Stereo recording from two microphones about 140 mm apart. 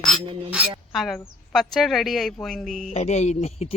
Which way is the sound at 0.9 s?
Centre (ahead or behind).